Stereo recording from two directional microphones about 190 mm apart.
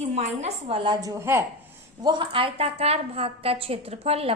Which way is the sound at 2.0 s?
25° right (ahead or behind).